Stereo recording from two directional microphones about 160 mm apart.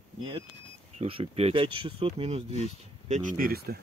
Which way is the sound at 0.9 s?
35° right (ahead or behind).